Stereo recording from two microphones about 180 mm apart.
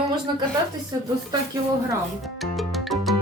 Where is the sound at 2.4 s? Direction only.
Centre (ahead or behind).